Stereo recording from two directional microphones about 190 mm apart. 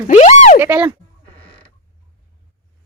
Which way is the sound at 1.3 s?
30° left (ahead or behind).